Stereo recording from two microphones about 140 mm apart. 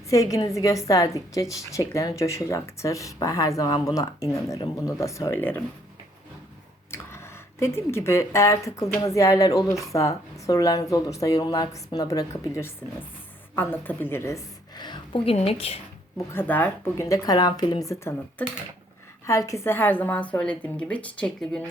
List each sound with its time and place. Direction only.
0.1 s a woman's voice: 25° left (ahead or behind)
7.6 s a woman's voice: 20° left (ahead or behind); by 15.8 s 45° left (ahead or behind)
16.1 s a woman's voice: 15° left (ahead or behind)
17.8 s a woman's voice: 20° left (ahead or behind)